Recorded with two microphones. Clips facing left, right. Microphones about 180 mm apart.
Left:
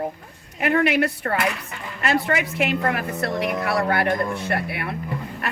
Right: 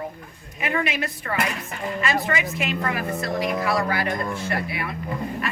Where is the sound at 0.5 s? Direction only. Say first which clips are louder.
Left 6 dB; 65° left (ahead or behind).